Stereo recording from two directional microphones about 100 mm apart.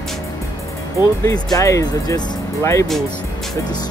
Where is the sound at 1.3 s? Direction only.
30° left (ahead or behind).